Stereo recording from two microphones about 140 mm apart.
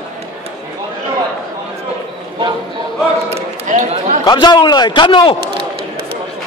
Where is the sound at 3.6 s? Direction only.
65° right (ahead or behind).